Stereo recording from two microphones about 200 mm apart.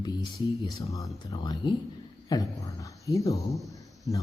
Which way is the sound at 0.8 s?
15° left (ahead or behind).